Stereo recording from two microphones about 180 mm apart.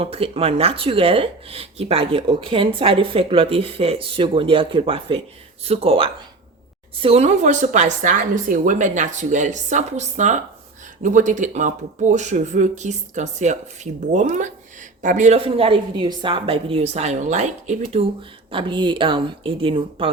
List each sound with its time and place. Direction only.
0.0 s speech: 30° right (ahead or behind)